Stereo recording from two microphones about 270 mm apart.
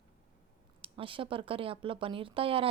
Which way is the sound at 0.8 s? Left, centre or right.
Centre.